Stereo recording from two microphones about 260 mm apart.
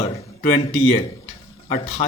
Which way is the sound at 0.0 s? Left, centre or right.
Left.